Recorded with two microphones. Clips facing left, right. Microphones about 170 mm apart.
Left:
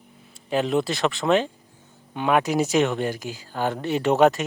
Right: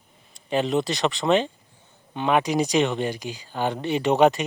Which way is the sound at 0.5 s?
5° left (ahead or behind).